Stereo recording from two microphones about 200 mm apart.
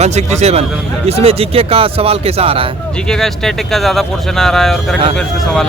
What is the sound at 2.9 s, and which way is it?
Speech, 5° left (ahead or behind).